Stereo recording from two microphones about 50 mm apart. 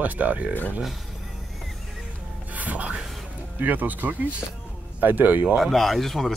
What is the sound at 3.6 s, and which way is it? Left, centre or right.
Speech, right.